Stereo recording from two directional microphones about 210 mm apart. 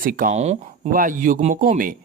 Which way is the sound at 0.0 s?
40° right (ahead or behind).